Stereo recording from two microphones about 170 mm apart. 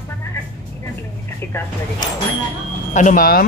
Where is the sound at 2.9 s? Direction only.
50° left (ahead or behind).